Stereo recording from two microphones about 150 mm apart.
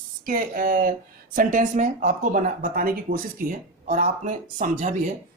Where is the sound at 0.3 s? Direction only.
70° right (ahead or behind).